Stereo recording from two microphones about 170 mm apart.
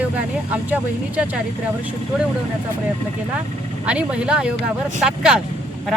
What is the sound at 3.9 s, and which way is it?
Speech, 5° right (ahead or behind).